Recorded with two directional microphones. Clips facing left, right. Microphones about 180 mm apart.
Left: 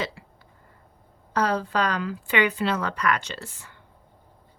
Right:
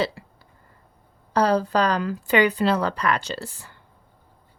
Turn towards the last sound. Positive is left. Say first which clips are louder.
# right 6 dB
turn(degrees=-35)  # may be behind; listen again after turning